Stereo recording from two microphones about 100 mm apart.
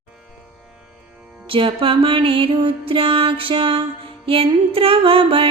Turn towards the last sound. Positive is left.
turn(degrees=-65)  # may be behind; listen again after turning